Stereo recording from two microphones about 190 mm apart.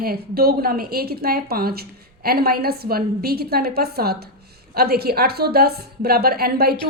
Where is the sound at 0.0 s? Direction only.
55° right (ahead or behind).